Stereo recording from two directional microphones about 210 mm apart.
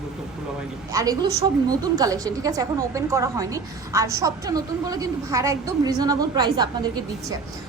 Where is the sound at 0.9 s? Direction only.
15° right (ahead or behind).